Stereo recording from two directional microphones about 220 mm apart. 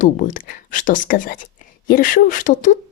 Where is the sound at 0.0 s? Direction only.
40° left (ahead or behind).